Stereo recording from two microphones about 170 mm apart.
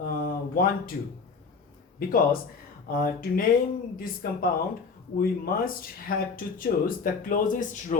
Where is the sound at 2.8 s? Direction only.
60° left (ahead or behind).